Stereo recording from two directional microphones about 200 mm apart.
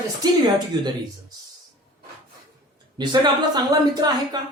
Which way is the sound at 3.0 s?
20° right (ahead or behind).